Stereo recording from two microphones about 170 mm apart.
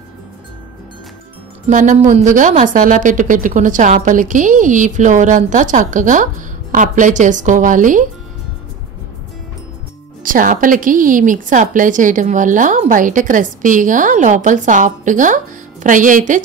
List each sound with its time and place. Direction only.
1.7 s a woman's voice: 50° right (ahead or behind)
10.2 s a woman's voice: 50° right (ahead or behind)